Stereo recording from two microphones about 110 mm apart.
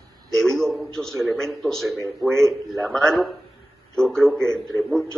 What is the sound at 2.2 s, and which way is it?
Speech, 25° right (ahead or behind).